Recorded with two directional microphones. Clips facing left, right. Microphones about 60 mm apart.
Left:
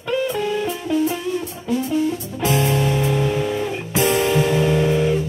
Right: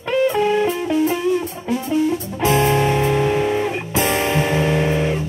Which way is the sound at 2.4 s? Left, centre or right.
Right.